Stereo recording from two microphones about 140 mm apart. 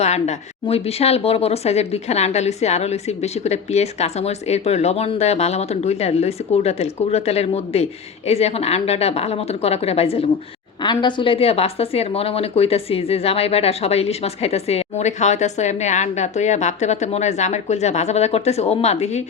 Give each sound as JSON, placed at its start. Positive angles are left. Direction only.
{"t": 0.0, "sound": "a woman's voice", "side_deg": 55}
{"t": 10.8, "sound": "a woman's voice", "side_deg": 35}